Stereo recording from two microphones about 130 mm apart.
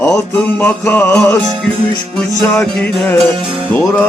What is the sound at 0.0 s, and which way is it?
Music, 20° left (ahead or behind).